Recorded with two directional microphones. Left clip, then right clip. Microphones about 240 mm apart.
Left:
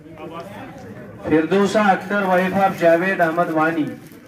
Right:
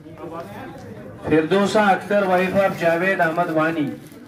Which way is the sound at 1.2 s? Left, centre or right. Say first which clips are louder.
Left 1 dB; right.